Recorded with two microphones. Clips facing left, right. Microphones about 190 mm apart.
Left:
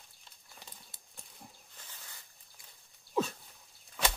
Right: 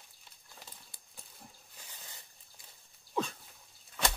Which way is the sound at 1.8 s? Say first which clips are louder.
Right 1 dB; 10° right (ahead or behind).